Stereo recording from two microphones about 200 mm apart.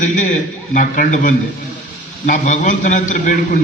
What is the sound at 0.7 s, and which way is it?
A man's voice, 40° left (ahead or behind).